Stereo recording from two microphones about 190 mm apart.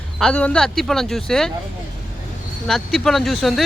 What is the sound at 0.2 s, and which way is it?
Speech, 5° left (ahead or behind).